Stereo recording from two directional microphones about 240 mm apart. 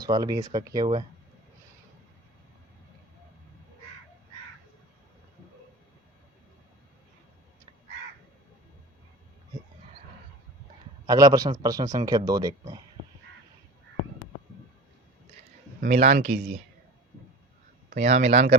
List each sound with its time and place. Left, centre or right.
0.0 s a man's voice: centre
11.0 s a man's voice: centre
15.8 s speech: right
17.8 s speech: right